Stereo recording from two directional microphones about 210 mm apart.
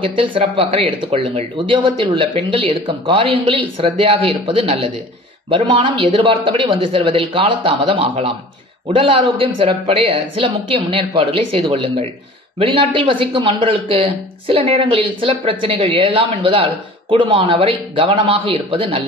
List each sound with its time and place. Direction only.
0.0 s speech: 25° right (ahead or behind)